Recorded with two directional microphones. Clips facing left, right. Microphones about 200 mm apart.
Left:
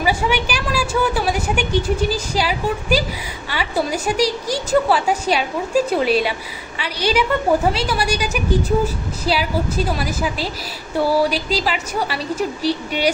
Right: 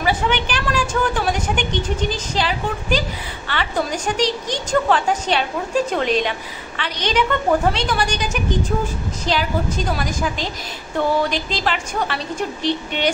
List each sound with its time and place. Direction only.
0.0 s a woman's voice: 10° left (ahead or behind)